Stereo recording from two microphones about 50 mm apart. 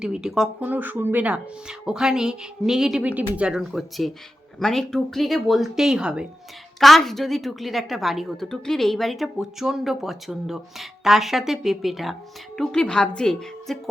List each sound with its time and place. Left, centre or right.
0.0 s speech: centre
0.6 s speech: right
1.6 s speech: centre
3.0 s speech: right
3.5 s speech: centre
4.6 s speech: centre
5.8 s speech: centre
6.7 s speech: centre
8.4 s a woman's voice: centre
12.8 s a woman's voice: centre
13.7 s speech: centre